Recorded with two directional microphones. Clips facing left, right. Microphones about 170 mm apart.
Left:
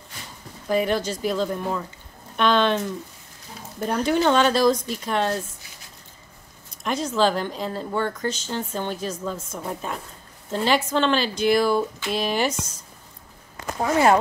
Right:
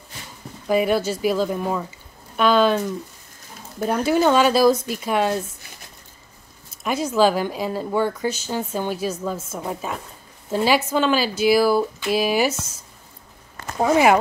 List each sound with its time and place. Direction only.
0.7 s speech: 10° right (ahead or behind)
3.8 s speech: 5° right (ahead or behind)
6.8 s speech: 10° right (ahead or behind)
13.7 s speech: 15° right (ahead or behind)